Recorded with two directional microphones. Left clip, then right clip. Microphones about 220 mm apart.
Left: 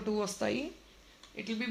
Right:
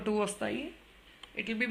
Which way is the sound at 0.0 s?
10° right (ahead or behind).